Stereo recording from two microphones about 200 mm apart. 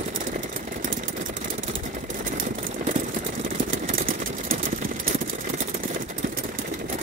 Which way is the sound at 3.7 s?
45° right (ahead or behind).